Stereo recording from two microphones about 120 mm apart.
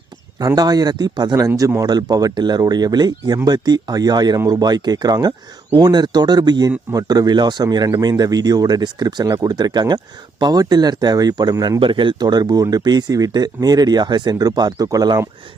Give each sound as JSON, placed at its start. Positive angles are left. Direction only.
{"t": 0.3, "sound": "speech", "side_deg": -30}
{"t": 1.5, "sound": "speech", "side_deg": -25}
{"t": 11.8, "sound": "speech", "side_deg": -45}